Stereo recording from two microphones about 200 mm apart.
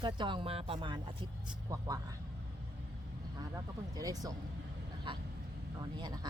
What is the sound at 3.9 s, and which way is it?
Speech, 20° right (ahead or behind).